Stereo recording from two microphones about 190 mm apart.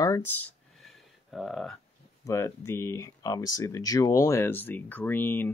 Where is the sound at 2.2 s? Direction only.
15° left (ahead or behind).